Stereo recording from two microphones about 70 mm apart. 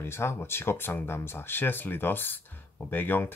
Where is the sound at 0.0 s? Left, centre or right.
Left.